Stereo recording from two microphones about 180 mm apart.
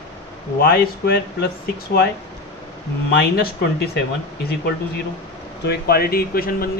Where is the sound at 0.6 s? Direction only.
60° left (ahead or behind).